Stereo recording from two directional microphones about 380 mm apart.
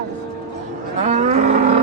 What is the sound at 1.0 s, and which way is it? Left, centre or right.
Livestock, centre.